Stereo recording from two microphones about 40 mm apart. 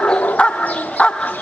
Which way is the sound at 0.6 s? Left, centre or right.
Left.